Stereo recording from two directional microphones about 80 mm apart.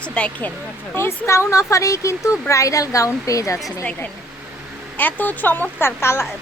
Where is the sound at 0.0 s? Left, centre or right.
Centre.